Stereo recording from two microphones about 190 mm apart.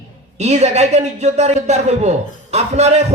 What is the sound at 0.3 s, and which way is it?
Speech, 35° right (ahead or behind).